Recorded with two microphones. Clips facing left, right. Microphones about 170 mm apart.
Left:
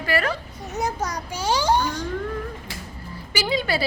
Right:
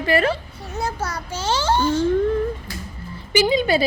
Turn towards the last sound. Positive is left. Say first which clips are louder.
# right 6 dB
turn(degrees=-20)  # may be behind; listen again after turning